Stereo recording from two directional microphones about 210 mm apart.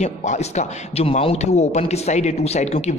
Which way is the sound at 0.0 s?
35° left (ahead or behind).